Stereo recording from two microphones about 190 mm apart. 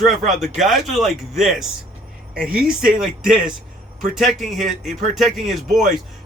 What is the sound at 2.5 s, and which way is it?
Speech, 50° right (ahead or behind).